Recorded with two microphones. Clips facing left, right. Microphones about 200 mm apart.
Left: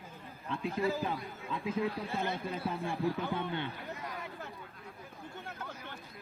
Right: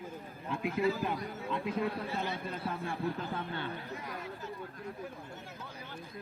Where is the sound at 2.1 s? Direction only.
50° left (ahead or behind).